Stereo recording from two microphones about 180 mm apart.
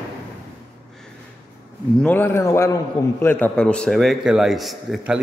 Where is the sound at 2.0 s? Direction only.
10° left (ahead or behind).